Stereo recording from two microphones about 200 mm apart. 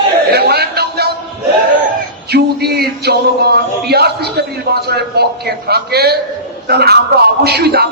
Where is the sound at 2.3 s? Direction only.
55° right (ahead or behind).